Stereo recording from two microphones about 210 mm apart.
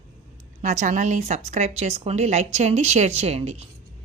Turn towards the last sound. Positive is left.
turn(degrees=-30)  # may be behind; listen again after turning